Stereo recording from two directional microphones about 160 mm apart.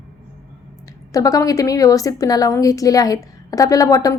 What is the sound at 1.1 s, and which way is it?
A woman's voice, 20° left (ahead or behind).